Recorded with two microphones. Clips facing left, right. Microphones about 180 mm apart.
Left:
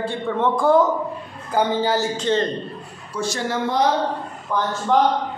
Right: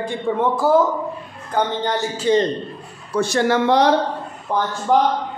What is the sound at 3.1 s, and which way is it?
Speech, 65° right (ahead or behind).